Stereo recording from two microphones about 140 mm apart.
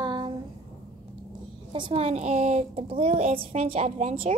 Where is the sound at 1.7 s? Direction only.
40° right (ahead or behind); by 4.1 s 55° right (ahead or behind).